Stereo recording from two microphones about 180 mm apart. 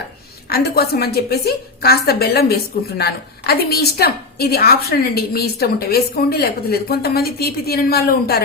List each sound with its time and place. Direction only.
0.5 s a woman's voice: 60° left (ahead or behind)